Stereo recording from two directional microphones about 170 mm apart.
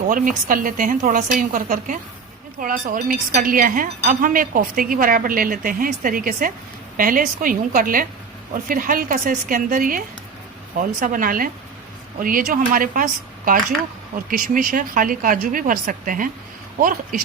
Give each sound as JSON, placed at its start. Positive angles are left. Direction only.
{"t": 0.1, "sound": "a woman's voice", "side_deg": -55}